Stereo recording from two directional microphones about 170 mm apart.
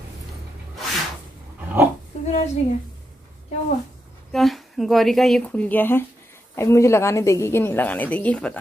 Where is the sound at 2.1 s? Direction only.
40° left (ahead or behind).